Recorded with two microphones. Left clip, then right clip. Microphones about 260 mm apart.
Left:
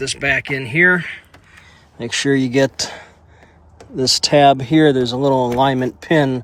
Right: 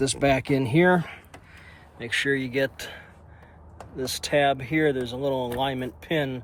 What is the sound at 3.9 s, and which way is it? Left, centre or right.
Speech, left.